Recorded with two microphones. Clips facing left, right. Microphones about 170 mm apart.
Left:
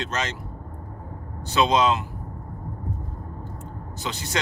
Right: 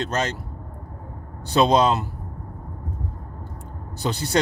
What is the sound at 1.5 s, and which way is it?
Speech, 35° right (ahead or behind).